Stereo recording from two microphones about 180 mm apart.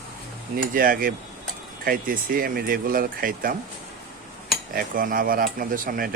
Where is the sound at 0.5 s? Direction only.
50° right (ahead or behind).